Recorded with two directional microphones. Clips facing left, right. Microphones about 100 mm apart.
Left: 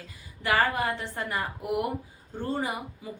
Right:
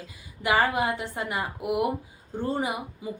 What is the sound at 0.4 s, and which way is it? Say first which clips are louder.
A woman's voice: right 2 dB; 15° right (ahead or behind).